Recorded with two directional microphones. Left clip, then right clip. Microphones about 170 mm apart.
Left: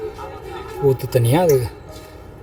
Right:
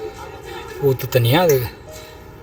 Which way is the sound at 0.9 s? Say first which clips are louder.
Even; 10° left (ahead or behind).